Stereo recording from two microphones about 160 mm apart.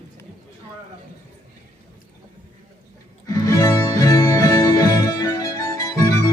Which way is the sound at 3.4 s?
20° left (ahead or behind).